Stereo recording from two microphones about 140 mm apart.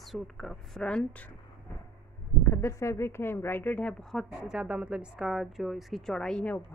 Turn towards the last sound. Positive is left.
turn(degrees=10)  # may be behind; listen again after turning